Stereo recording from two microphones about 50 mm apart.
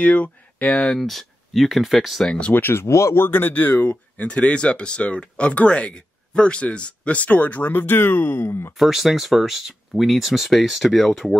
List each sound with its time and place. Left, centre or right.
0.0 s speech: left
0.9 s speech: centre
2.5 s speech: left
3.2 s speech: left
8.5 s speech: left
8.7 s speech: centre